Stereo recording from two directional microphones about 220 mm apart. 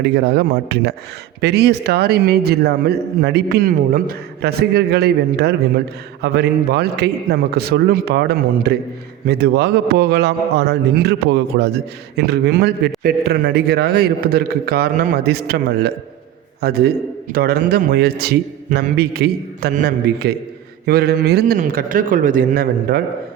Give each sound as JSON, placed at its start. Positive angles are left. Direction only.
{"t": 0.0, "sound": "a man's voice", "side_deg": -50}